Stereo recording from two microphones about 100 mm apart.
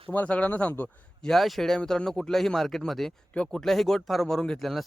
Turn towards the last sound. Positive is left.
turn(degrees=0)  # may be behind; listen again after turning